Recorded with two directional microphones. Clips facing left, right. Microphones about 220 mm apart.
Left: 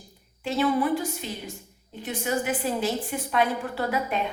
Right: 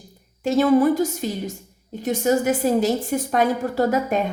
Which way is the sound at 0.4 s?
45° right (ahead or behind).